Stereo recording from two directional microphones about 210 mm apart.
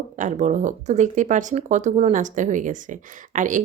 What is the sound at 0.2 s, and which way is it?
A woman's voice, 35° right (ahead or behind).